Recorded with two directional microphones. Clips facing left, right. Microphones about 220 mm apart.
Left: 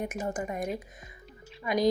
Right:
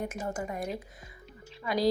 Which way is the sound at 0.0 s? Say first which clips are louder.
Left 2 dB; 20° left (ahead or behind).